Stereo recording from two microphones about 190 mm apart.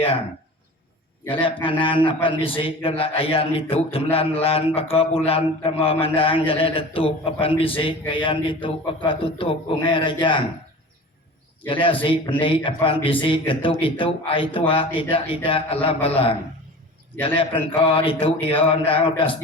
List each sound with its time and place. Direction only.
1.8 s a man's voice: 25° left (ahead or behind)
11.6 s a man's voice: 25° left (ahead or behind)